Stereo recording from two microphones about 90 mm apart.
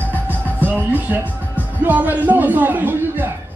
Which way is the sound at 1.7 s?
20° right (ahead or behind).